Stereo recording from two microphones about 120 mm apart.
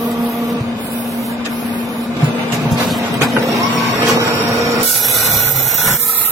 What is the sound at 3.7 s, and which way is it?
Vehicle, 30° right (ahead or behind).